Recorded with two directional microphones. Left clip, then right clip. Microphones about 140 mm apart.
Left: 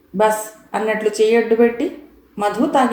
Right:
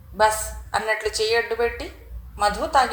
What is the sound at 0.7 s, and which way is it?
A man's voice, 35° right (ahead or behind).